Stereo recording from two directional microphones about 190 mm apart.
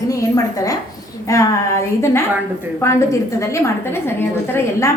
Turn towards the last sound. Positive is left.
turn(degrees=10)  # may be behind; listen again after turning